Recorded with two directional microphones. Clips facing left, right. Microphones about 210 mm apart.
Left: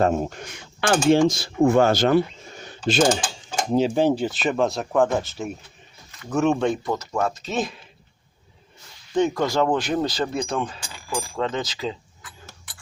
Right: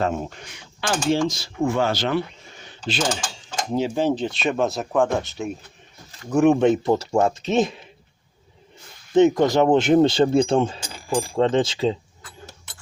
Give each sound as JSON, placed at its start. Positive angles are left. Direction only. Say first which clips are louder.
{"t": 0.0, "sound": "speech", "louder": "left 4 dB", "side_deg": 45}
{"t": 3.7, "sound": "speech", "louder": "left 2 dB", "side_deg": 15}
{"t": 6.3, "sound": "speech", "louder": "right 5 dB", "side_deg": -15}
{"t": 9.1, "sound": "speech", "louder": "right 5 dB", "side_deg": -20}
{"t": 10.8, "sound": "a sound", "louder": "right 5 dB", "side_deg": -45}
{"t": 11.2, "sound": "speech", "louder": "right 7 dB", "side_deg": -30}